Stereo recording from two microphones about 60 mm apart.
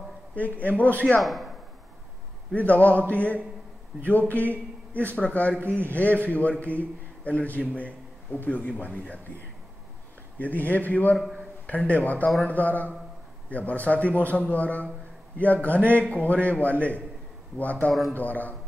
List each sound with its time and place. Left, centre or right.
0.4 s a man's voice: left
1.2 s speech: centre
2.5 s a man's voice: left
7.5 s a man's voice: left
10.4 s a man's voice: left
11.1 s a man's voice: centre
11.6 s a man's voice: left